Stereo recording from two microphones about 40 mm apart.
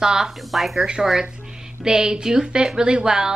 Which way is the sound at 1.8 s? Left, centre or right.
Centre.